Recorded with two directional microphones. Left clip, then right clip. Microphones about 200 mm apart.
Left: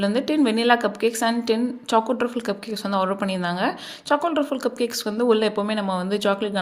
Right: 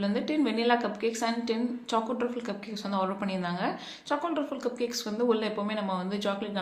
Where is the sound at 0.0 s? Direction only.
45° left (ahead or behind).